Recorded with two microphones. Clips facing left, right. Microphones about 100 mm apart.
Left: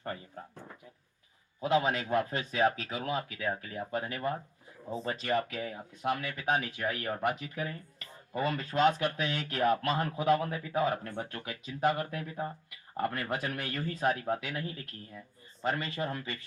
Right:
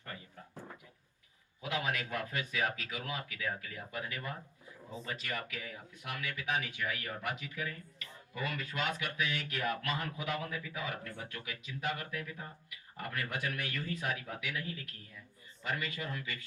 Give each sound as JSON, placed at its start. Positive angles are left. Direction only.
{"t": 1.6, "sound": "speech", "side_deg": 35}